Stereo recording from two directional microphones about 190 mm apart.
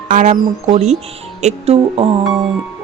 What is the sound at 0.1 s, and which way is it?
Speech, 40° right (ahead or behind).